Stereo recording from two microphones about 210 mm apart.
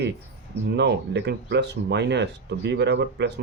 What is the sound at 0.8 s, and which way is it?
A man's voice, 55° right (ahead or behind).